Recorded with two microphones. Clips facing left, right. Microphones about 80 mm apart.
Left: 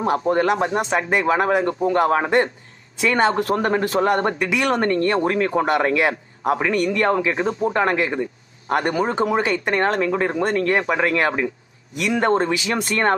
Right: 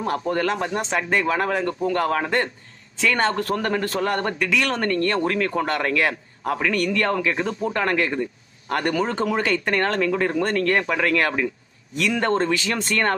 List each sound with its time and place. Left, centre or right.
0.0 s a man's voice: left